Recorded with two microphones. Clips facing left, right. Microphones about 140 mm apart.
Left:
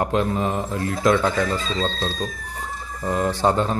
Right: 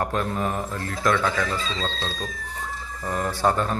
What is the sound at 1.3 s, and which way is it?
Speech, 30° left (ahead or behind).